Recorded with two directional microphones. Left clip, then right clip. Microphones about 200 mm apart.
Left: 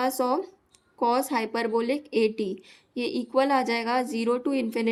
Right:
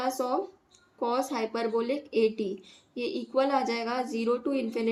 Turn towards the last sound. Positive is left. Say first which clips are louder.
# left 3 dB
turn(degrees=55)  # may be behind; listen again after turning